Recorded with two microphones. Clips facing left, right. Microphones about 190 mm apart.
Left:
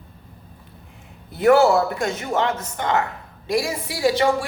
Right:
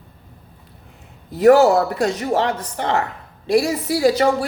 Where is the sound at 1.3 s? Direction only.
35° right (ahead or behind).